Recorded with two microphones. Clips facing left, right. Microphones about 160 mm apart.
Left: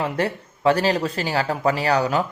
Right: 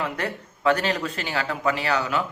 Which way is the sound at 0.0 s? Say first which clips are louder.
Left 5 dB; 30° left (ahead or behind).